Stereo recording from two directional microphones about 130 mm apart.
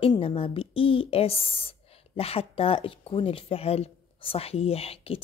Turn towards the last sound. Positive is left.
turn(degrees=50)  # may be behind; listen again after turning